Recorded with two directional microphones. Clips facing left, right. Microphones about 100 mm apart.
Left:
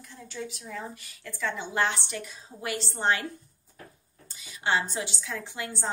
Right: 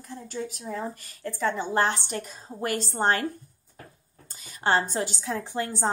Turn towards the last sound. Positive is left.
turn(degrees=-40)  # may be behind; listen again after turning